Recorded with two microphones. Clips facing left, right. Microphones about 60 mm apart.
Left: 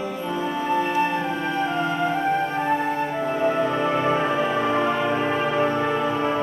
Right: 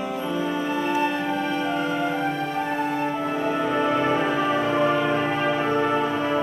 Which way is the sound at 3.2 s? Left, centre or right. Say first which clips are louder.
Left 2 dB; centre.